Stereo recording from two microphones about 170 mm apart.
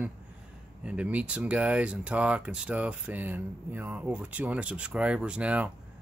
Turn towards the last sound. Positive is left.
turn(degrees=-10)  # may be behind; listen again after turning